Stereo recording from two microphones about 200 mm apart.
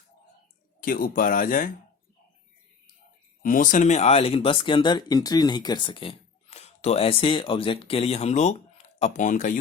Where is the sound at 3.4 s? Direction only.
40° left (ahead or behind).